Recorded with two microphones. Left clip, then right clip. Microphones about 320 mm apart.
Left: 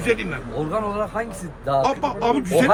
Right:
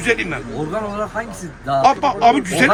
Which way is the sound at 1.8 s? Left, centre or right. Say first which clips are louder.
Right 8 dB; centre.